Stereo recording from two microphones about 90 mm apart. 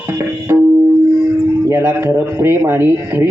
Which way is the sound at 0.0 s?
25° right (ahead or behind).